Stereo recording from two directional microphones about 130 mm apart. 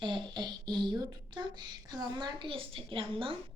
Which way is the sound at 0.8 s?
35° right (ahead or behind).